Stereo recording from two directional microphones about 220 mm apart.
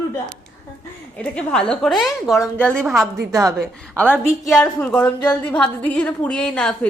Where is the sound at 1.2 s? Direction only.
5° left (ahead or behind).